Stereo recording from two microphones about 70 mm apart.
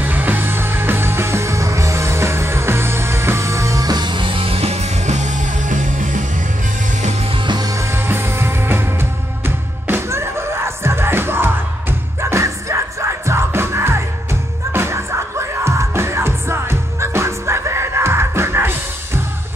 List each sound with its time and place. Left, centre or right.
0.0 s music: right
3.8 s music: right
7.4 s music: right
7.7 s music: right
9.8 s music: right